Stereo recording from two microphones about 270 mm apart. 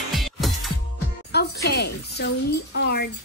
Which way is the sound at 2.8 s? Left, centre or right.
Left.